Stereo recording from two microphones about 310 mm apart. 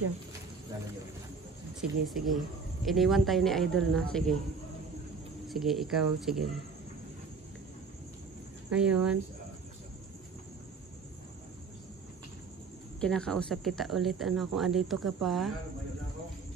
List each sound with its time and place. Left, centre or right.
1.8 s speech: centre
5.5 s speech: centre
8.6 s speech: centre
13.0 s speech: centre